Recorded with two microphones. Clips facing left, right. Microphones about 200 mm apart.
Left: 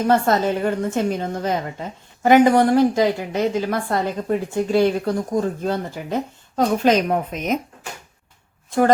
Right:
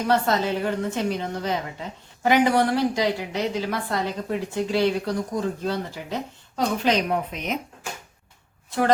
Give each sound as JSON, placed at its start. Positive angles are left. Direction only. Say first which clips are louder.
{"t": 0.1, "sound": "a woman's voice", "louder": "left 3 dB", "side_deg": 45}